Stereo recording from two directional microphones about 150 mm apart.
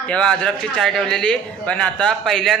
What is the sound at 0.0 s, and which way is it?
A man's voice, 5° left (ahead or behind).